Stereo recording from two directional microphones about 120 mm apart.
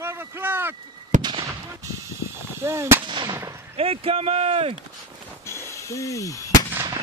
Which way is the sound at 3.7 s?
55° right (ahead or behind).